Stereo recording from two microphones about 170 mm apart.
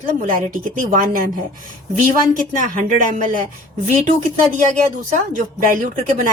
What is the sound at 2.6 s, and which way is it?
Speech, 50° right (ahead or behind).